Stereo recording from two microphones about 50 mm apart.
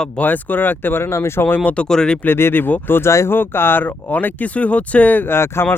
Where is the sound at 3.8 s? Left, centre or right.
Left.